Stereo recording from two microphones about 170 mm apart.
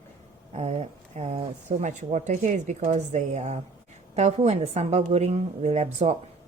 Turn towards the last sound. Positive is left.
turn(degrees=-40)  # may be behind; listen again after turning